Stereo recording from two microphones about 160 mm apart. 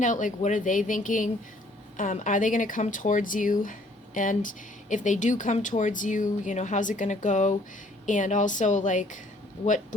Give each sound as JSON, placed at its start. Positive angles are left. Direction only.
{"t": 0.0, "sound": "speech", "side_deg": 55}